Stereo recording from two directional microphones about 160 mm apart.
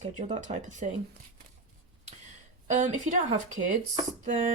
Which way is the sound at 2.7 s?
50° right (ahead or behind).